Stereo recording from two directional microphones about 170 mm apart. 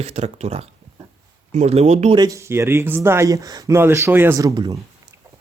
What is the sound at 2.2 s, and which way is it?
Speech, 15° right (ahead or behind).